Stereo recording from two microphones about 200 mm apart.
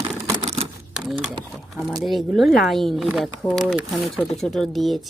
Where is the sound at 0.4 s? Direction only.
30° right (ahead or behind).